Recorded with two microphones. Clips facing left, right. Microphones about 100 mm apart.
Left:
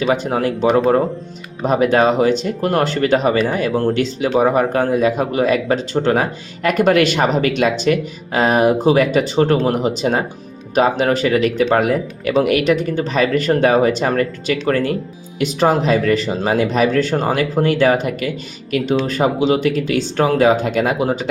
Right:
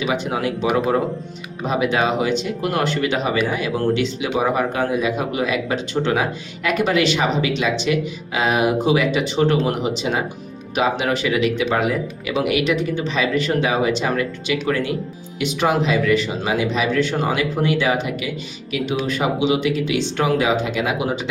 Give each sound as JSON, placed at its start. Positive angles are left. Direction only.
{"t": 0.0, "sound": "a man's voice", "side_deg": 40}